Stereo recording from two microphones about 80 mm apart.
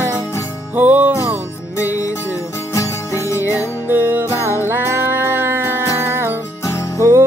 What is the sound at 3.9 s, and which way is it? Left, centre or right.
Music, right.